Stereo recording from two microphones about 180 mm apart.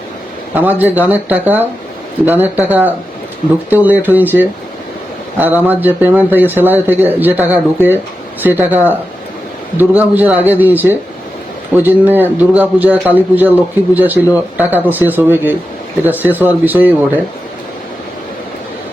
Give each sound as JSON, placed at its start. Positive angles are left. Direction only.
{"t": 0.5, "sound": "a man's voice", "side_deg": -10}